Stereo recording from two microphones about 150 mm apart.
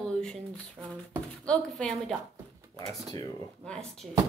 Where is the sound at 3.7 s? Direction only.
5° left (ahead or behind).